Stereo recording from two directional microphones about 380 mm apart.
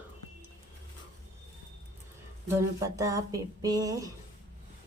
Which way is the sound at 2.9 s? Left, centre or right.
Centre.